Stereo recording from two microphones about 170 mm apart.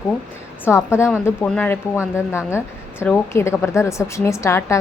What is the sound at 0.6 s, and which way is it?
A woman's voice, 15° left (ahead or behind).